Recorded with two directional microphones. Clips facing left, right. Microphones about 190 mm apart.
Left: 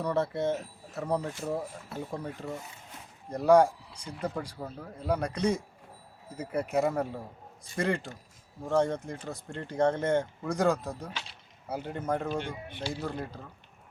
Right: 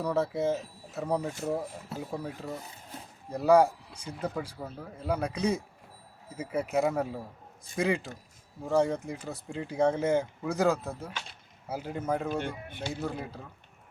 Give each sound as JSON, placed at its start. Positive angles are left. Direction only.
{"t": 0.0, "sound": "speech", "side_deg": -5}
{"t": 11.1, "sound": "speech", "side_deg": -50}
{"t": 11.7, "sound": "speech", "side_deg": -5}